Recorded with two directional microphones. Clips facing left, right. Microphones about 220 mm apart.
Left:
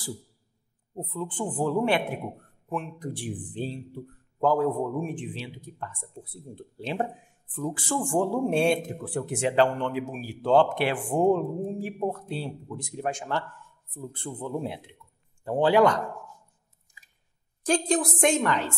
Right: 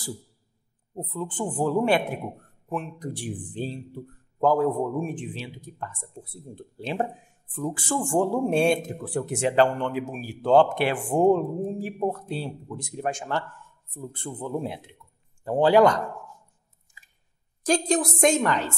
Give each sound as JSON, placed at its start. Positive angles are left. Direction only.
{"t": 0.9, "sound": "speech", "side_deg": -45}
{"t": 15.0, "sound": "a sound", "side_deg": -35}
{"t": 15.4, "sound": "speech", "side_deg": -40}
{"t": 17.6, "sound": "speech", "side_deg": -40}